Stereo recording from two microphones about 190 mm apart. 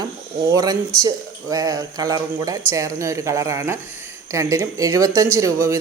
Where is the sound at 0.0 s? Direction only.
20° right (ahead or behind).